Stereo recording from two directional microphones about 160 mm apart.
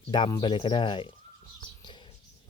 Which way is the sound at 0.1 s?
25° left (ahead or behind).